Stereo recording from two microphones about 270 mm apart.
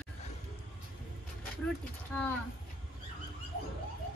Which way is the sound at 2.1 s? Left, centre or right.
Centre.